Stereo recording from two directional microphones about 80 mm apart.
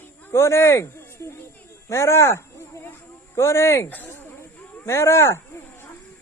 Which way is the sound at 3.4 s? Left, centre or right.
Left.